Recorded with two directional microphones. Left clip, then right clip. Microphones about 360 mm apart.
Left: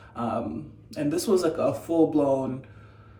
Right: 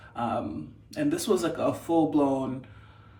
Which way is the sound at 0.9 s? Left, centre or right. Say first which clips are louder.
Left 2 dB; centre.